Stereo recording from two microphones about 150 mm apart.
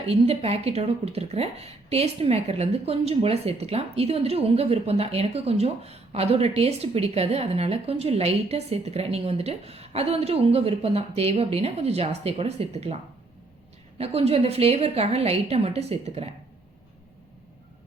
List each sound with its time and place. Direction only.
0.0 s speech: 45° right (ahead or behind)
14.0 s speech: 40° right (ahead or behind)